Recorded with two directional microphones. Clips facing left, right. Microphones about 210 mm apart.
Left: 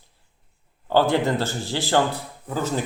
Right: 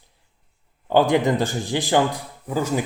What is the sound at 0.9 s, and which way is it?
Speech, 15° right (ahead or behind).